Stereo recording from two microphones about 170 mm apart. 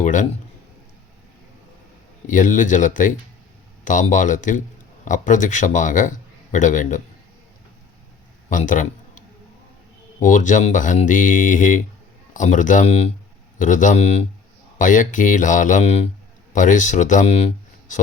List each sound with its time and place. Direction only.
0.0 s speech: 50° left (ahead or behind)
2.2 s a man's voice: 50° left (ahead or behind)
8.4 s a sound: 50° left (ahead or behind)
10.2 s a man's voice: 50° left (ahead or behind)